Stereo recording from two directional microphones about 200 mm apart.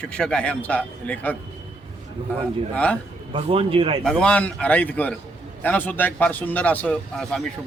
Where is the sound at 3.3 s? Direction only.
30° right (ahead or behind).